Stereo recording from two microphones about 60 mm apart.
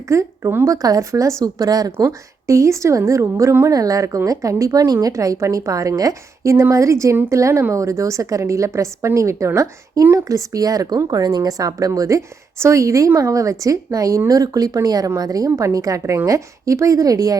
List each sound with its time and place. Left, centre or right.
0.1 s a woman's voice: right
0.6 s speech: right
2.0 s a woman's voice: right
3.7 s a woman's voice: right
10.2 s speech: right
11.9 s a woman's voice: right
15.4 s a woman's voice: right